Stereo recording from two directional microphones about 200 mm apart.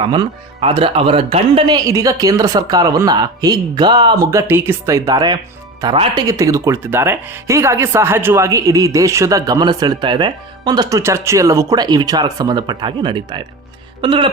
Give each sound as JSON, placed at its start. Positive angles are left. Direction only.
{"t": 0.0, "sound": "speech", "side_deg": -25}